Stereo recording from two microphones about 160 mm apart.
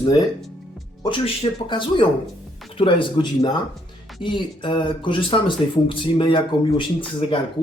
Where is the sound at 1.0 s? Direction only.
30° left (ahead or behind).